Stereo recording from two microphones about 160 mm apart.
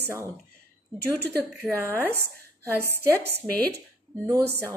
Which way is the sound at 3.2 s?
90° right.